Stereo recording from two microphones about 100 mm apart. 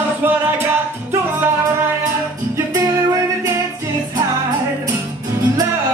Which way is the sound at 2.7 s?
35° right (ahead or behind).